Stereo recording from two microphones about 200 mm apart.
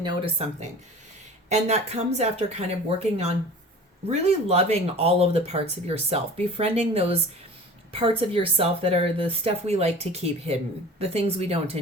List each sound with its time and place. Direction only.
0.0 s speech: 30° right (ahead or behind)